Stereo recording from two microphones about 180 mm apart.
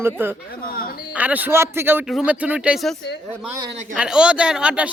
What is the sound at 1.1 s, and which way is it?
Speech, 10° right (ahead or behind).